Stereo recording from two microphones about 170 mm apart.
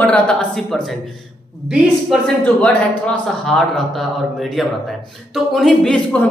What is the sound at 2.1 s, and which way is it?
A man's voice, 10° left (ahead or behind).